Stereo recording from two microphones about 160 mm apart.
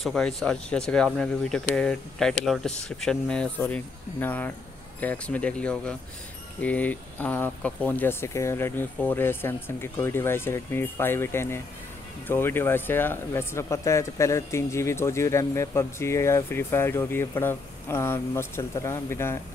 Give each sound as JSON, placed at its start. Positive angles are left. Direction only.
{"t": 0.0, "sound": "speech", "side_deg": 5}